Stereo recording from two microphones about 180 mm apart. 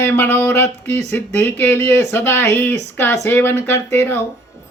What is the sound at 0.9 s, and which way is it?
Speech, 40° right (ahead or behind).